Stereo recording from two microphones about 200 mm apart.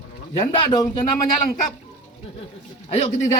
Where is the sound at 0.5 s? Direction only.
20° left (ahead or behind).